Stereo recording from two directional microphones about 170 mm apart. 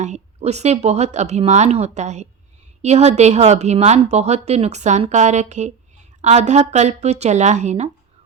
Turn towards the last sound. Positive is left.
turn(degrees=-45)  # may be behind; listen again after turning